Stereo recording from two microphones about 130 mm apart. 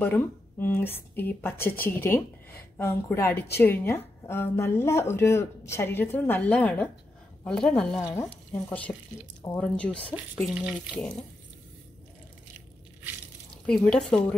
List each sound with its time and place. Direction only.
0.0 s speech: 15° left (ahead or behind)
8.1 s speech: 15° left (ahead or behind)
10.1 s speech: 10° right (ahead or behind)
13.7 s speech: 5° left (ahead or behind)